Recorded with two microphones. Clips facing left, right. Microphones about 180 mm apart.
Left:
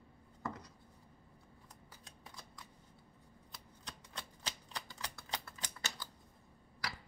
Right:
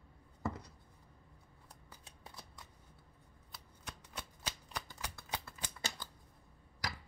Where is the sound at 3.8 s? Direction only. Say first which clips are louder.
Right 2 dB; 10° right (ahead or behind).